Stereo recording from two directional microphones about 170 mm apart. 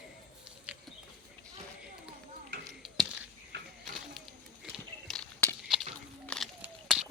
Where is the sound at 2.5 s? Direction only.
90° right.